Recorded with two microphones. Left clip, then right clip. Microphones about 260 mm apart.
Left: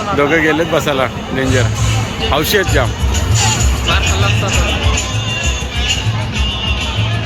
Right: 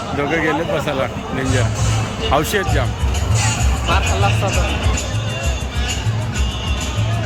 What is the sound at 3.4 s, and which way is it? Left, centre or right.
Music, right.